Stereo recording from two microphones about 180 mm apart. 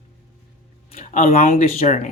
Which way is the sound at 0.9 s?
40° left (ahead or behind).